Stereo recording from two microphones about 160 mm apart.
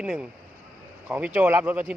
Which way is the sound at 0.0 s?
5° right (ahead or behind).